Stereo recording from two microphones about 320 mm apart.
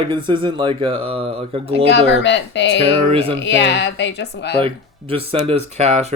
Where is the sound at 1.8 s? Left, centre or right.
Left.